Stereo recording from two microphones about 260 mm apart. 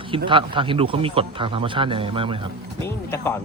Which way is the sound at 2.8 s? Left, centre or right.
Centre.